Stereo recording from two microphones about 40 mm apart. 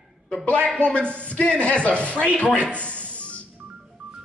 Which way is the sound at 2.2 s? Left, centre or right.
Left.